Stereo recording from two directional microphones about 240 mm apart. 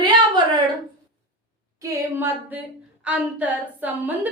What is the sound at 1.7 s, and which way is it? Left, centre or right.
A woman's voice, centre.